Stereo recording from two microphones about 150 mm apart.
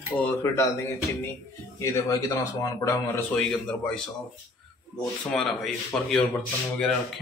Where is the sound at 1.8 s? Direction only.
20° left (ahead or behind).